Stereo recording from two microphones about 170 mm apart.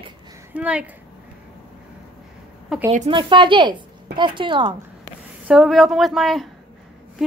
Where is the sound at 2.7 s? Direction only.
5° right (ahead or behind).